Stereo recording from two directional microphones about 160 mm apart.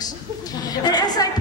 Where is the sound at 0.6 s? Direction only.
25° left (ahead or behind).